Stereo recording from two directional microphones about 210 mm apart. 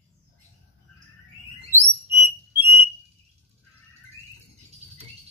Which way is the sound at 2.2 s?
10° right (ahead or behind).